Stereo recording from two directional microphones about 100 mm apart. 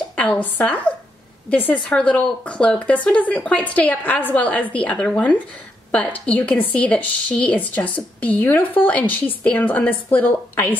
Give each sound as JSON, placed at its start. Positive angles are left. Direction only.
{"t": 0.1, "sound": "a woman's voice", "side_deg": 15}